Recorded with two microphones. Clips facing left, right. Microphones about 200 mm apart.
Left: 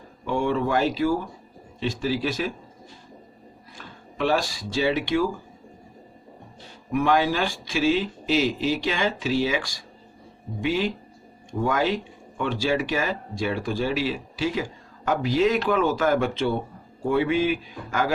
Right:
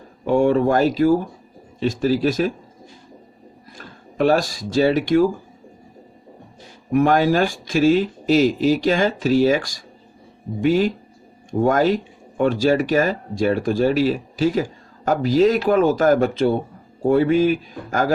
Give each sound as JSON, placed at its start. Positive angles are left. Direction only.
{"t": 0.3, "sound": "speech", "side_deg": -45}
{"t": 3.8, "sound": "speech", "side_deg": -45}
{"t": 6.9, "sound": "speech", "side_deg": -45}